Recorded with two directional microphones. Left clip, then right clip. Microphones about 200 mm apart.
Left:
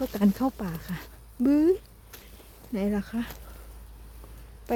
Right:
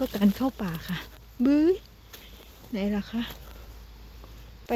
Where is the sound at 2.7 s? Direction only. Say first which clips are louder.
Left 1 dB; 15° left (ahead or behind).